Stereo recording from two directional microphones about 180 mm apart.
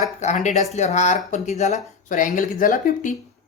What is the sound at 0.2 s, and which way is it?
Speech, 40° left (ahead or behind).